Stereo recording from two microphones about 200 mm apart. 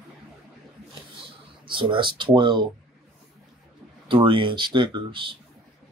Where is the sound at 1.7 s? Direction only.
25° right (ahead or behind).